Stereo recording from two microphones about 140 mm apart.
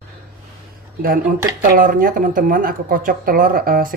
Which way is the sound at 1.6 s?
85° right.